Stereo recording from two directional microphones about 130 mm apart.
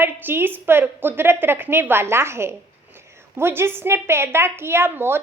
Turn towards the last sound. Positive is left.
turn(degrees=-15)  # may be behind; listen again after turning